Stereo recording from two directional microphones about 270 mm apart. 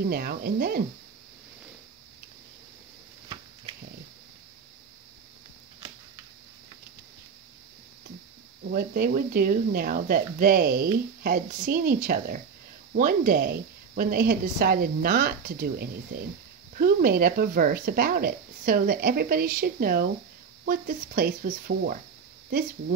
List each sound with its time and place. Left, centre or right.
0.1 s speech: right
8.6 s speech: right